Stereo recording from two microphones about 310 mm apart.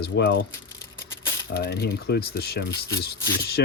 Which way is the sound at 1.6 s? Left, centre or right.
Left.